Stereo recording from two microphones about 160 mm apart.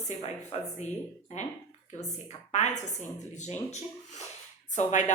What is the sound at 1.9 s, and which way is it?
A woman's voice, 45° left (ahead or behind).